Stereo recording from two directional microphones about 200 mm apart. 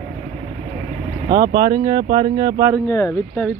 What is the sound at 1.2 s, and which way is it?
Speech, 45° right (ahead or behind).